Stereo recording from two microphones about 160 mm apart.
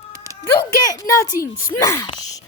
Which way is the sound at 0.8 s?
20° left (ahead or behind).